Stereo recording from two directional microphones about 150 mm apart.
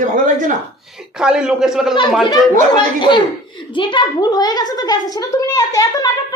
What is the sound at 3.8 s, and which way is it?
A child's voice, 30° left (ahead or behind).